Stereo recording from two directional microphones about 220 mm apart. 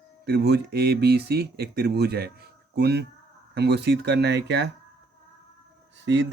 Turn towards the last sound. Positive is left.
turn(degrees=-55)  # may be behind; listen again after turning